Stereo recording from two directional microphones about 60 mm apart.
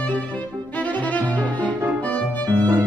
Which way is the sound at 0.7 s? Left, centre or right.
Left.